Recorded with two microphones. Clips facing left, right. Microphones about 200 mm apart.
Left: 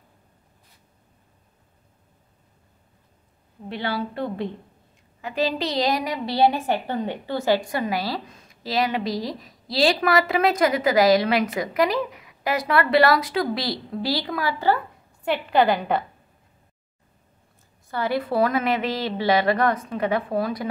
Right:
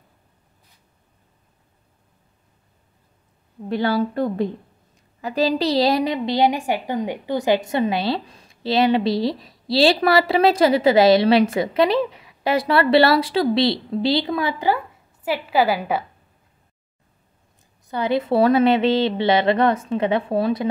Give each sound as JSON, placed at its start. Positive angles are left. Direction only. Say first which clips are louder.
{"t": 3.6, "sound": "a woman's voice", "louder": "right 7 dB", "side_deg": -45}
{"t": 15.2, "sound": "a woman's voice", "louder": "even", "side_deg": -5}
{"t": 17.8, "sound": "a woman's voice", "louder": "right 4 dB", "side_deg": -20}